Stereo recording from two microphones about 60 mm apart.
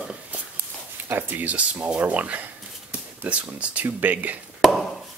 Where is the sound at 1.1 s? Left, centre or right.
Right.